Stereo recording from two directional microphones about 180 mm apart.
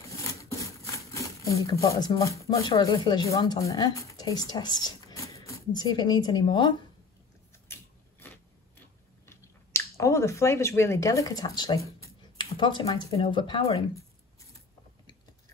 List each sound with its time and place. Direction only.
0.2 s a woman's voice: 15° left (ahead or behind)
7.5 s a sound: 15° left (ahead or behind)
12.0 s speech: 25° left (ahead or behind)